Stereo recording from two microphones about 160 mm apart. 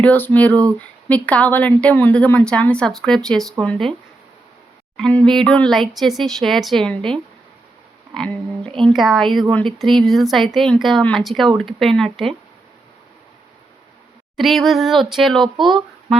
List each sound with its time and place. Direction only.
0.0 s a woman's voice: 10° left (ahead or behind)
4.9 s speech: 5° left (ahead or behind)
8.8 s speech: centre (ahead or behind)
14.3 s speech: centre (ahead or behind)
15.5 s speech: 30° right (ahead or behind)